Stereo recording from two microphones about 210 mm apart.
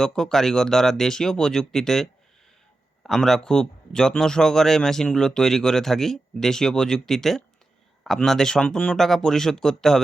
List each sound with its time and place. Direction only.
0.0 s a man's voice: centre (ahead or behind)